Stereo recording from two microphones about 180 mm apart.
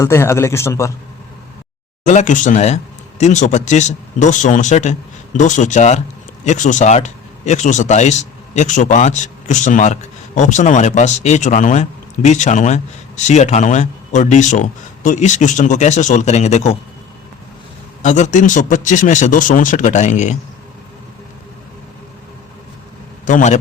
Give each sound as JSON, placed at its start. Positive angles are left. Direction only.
{"t": 0.0, "sound": "a man's voice", "side_deg": 15}
{"t": 2.0, "sound": "speech", "side_deg": 40}
{"t": 18.0, "sound": "speech", "side_deg": 45}
{"t": 23.2, "sound": "speech", "side_deg": 45}